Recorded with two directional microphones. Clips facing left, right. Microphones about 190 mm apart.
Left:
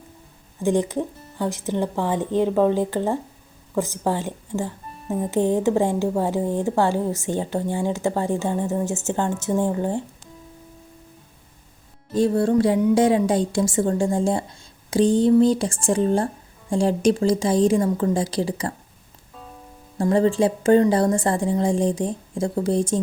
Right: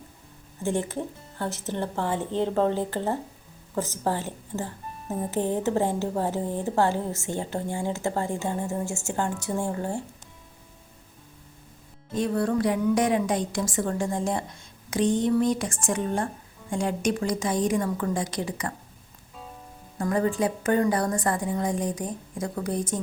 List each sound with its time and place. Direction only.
0.6 s a woman's voice: 15° left (ahead or behind)
12.1 s a woman's voice: 30° left (ahead or behind)
20.0 s a woman's voice: 30° left (ahead or behind)